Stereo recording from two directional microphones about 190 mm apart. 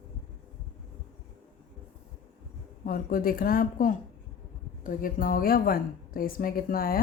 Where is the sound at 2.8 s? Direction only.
50° left (ahead or behind).